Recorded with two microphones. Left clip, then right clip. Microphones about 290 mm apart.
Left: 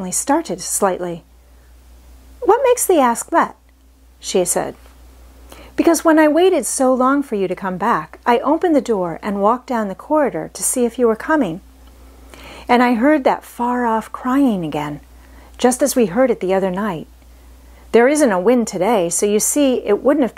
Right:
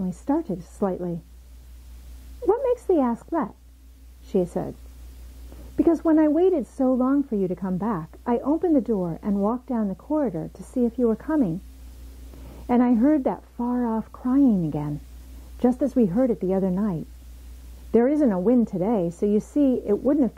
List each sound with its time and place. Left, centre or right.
0.0 s a woman's voice: centre
2.4 s a woman's voice: centre
14.4 s speech: left
14.7 s a woman's voice: centre